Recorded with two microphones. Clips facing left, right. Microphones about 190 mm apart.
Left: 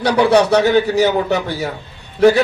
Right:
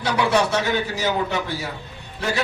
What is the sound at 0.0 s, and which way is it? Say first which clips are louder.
A man's voice: left 7 dB; 65° left (ahead or behind).